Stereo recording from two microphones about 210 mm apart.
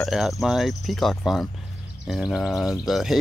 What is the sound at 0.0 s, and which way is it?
Speech, centre (ahead or behind).